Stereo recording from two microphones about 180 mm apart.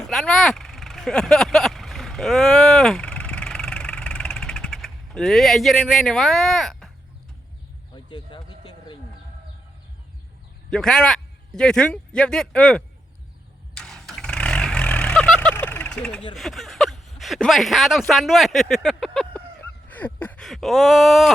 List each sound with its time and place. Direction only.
0.0 s vehicle: 5° left (ahead or behind)
7.9 s a sound: 25° left (ahead or behind)
10.7 s a man's voice: 5° left (ahead or behind)
13.7 s vehicle: centre (ahead or behind)
16.3 s a sound: centre (ahead or behind)
18.1 s speech: centre (ahead or behind)